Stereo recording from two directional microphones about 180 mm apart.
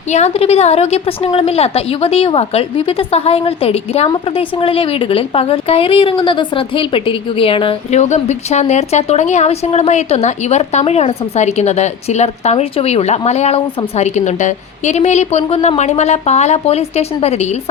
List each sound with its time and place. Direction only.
0.1 s a woman's voice: 35° left (ahead or behind)